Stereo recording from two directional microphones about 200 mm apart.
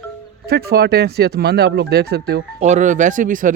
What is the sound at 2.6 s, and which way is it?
Speech, 35° right (ahead or behind).